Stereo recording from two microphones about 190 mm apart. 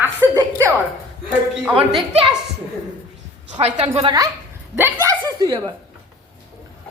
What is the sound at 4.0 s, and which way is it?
Speech, 25° right (ahead or behind).